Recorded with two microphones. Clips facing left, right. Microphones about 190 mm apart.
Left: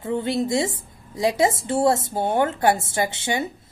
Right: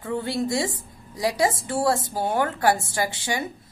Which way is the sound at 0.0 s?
20° left (ahead or behind).